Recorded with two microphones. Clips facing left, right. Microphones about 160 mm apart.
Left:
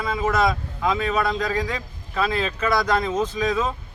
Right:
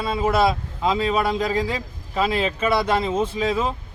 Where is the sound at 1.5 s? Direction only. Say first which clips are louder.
Right 2 dB; 25° right (ahead or behind).